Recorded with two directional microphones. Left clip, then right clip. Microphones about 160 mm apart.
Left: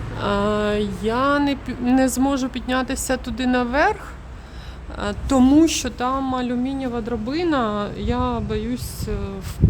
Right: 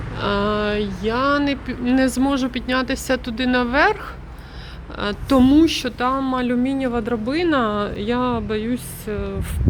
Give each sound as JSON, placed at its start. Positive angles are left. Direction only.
{"t": 0.2, "sound": "speech", "side_deg": 15}
{"t": 2.0, "sound": "speech", "side_deg": 10}
{"t": 4.9, "sound": "a woman's voice", "side_deg": 5}
{"t": 5.4, "sound": "speech", "side_deg": 20}